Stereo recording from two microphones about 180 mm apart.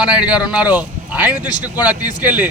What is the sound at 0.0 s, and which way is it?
A man's voice, 5° right (ahead or behind).